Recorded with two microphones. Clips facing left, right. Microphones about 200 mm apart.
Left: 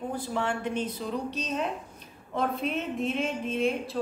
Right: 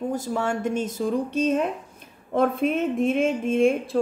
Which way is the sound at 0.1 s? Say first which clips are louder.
Right 5 dB; 45° right (ahead or behind).